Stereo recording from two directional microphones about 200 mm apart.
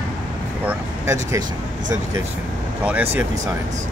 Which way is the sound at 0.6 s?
15° right (ahead or behind).